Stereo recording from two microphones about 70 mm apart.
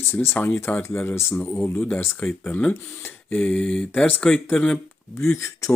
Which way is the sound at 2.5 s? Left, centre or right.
Left.